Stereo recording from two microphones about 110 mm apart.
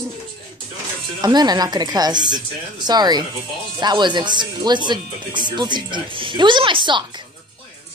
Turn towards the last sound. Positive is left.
turn(degrees=-50)  # may be behind; listen again after turning